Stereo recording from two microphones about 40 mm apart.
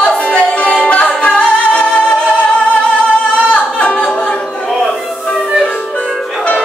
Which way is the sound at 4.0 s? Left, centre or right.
Left.